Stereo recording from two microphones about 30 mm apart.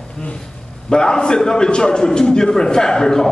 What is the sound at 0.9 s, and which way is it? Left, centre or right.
A man's voice, left.